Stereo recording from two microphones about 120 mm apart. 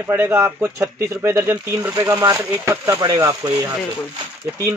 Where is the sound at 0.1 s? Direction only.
20° right (ahead or behind).